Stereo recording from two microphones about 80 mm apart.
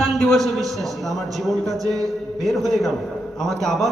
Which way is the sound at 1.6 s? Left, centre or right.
Right.